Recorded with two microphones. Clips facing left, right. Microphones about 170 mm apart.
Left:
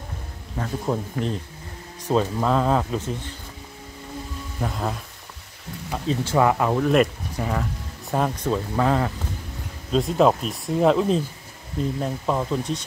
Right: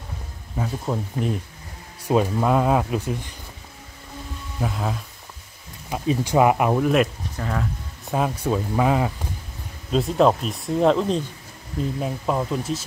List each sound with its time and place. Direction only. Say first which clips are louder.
0.6 s speech: left 1 dB; 10° right (ahead or behind)
4.6 s speech: right 1 dB; centre (ahead or behind)
5.9 s speech: right 2 dB; 15° right (ahead or behind)
7.3 s speech: left 1 dB; 5° left (ahead or behind)
8.1 s speech: even; 5° right (ahead or behind)